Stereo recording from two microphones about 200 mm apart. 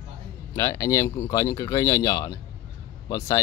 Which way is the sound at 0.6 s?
15° left (ahead or behind).